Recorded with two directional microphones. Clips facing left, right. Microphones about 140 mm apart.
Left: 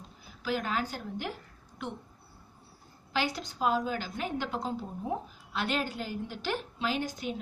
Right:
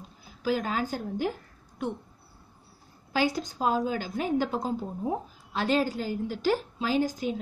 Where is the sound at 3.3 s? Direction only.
45° right (ahead or behind).